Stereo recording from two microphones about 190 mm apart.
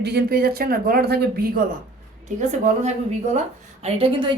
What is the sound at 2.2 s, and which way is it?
A woman's voice, 40° right (ahead or behind).